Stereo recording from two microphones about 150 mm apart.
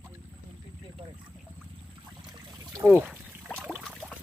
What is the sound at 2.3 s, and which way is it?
Trickle, 25° right (ahead or behind).